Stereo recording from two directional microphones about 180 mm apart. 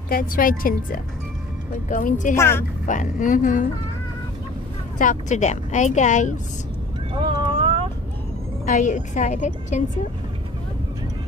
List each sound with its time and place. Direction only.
0.1 s a woman's voice: 50° left (ahead or behind)
2.3 s a woman's voice: 15° left (ahead or behind)
2.9 s a woman's voice: 45° left (ahead or behind)
4.9 s a woman's voice: 45° left (ahead or behind)
7.2 s vehicle: 25° right (ahead or behind)
8.6 s a woman's voice: 45° left (ahead or behind)